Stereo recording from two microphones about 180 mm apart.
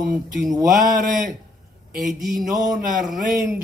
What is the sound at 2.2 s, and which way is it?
Speech, centre (ahead or behind).